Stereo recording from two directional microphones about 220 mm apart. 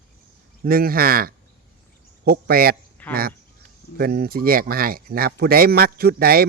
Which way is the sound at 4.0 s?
45° right (ahead or behind).